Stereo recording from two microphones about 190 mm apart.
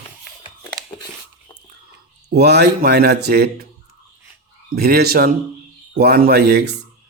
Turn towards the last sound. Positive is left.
turn(degrees=-60)  # may be behind; listen again after turning